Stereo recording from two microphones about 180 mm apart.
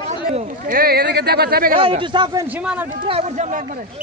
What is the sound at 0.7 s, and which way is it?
Speech, 55° right (ahead or behind).